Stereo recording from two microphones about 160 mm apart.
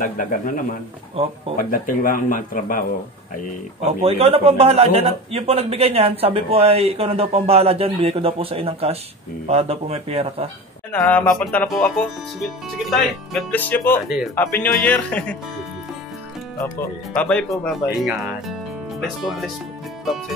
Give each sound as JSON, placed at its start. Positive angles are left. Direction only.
{"t": 0.0, "sound": "speech", "side_deg": 60}
{"t": 4.0, "sound": "a man's voice", "side_deg": -40}
{"t": 10.9, "sound": "a man's voice", "side_deg": 10}
{"t": 14.0, "sound": "speech", "side_deg": -5}
{"t": 14.3, "sound": "a man's voice", "side_deg": 10}
{"t": 17.1, "sound": "a man's voice", "side_deg": 5}
{"t": 18.9, "sound": "speech", "side_deg": 0}